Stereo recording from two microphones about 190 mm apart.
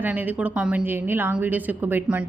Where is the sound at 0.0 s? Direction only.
10° right (ahead or behind).